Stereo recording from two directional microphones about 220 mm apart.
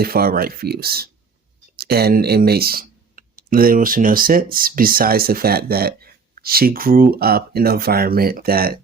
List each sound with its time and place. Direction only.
0.0 s speech: 45° right (ahead or behind)